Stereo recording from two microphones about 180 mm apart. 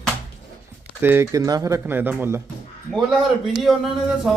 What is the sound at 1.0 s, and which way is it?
A man's voice, 15° right (ahead or behind).